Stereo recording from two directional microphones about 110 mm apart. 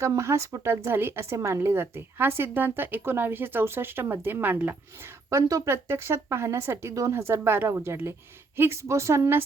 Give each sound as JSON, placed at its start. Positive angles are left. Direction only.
{"t": 0.0, "sound": "speech", "side_deg": -25}
{"t": 5.3, "sound": "speech", "side_deg": -30}